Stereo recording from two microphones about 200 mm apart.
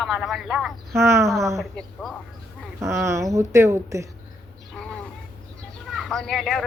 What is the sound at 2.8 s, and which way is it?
A woman's voice, 15° right (ahead or behind).